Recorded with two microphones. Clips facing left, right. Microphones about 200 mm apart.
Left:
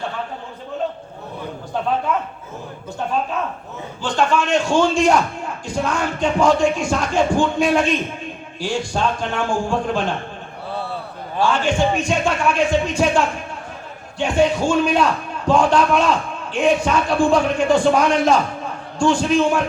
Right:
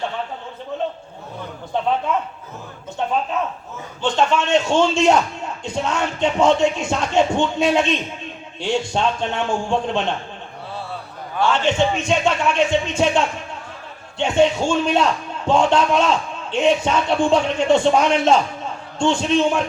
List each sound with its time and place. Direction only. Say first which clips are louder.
4.0 s a man's voice: even; 25° right (ahead or behind)
11.4 s a man's voice: even; 25° right (ahead or behind)